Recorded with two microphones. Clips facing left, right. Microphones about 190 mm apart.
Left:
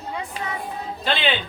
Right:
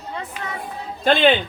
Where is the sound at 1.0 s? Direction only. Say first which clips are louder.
Right 8 dB; 50° right (ahead or behind).